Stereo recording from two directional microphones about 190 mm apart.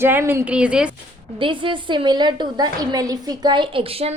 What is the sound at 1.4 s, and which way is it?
A woman's voice, 25° right (ahead or behind).